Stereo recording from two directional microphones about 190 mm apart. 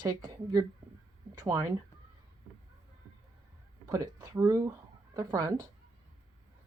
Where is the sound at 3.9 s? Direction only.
15° right (ahead or behind).